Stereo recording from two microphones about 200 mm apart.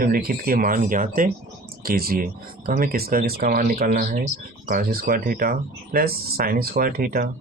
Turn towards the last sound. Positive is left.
turn(degrees=-45)  # may be behind; listen again after turning